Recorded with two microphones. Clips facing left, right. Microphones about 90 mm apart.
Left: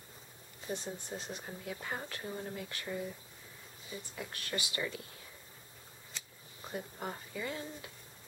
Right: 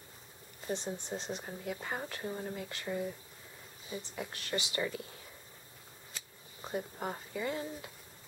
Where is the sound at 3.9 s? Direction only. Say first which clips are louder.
Right 3 dB; 20° right (ahead or behind).